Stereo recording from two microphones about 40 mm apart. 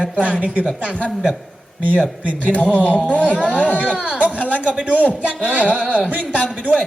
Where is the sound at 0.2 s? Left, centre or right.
Right.